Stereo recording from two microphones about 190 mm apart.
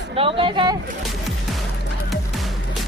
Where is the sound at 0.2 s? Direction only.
30° right (ahead or behind).